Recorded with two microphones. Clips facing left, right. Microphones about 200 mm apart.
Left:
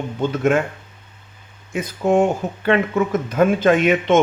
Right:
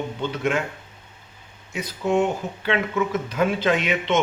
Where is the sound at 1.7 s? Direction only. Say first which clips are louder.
Left 5 dB; 50° left (ahead or behind).